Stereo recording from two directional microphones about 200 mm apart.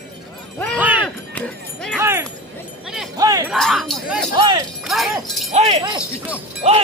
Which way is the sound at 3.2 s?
20° right (ahead or behind).